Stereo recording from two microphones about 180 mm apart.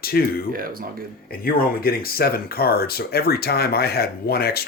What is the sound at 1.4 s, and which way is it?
Speech, 55° left (ahead or behind).